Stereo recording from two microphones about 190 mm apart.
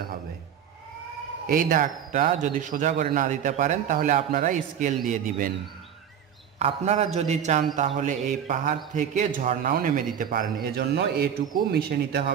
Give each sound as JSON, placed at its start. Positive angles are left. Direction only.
{"t": 1.5, "sound": "a man's voice", "side_deg": -45}
{"t": 6.6, "sound": "a man's voice", "side_deg": -35}